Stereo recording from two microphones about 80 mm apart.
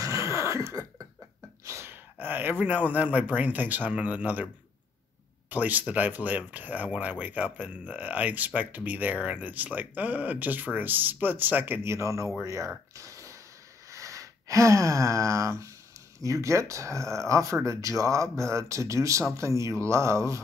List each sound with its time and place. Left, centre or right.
0.0 s throat clearing: right
1.6 s gasp: right
2.6 s speech: right
5.5 s speech: right
12.4 s a sound: right
13.8 s speech: right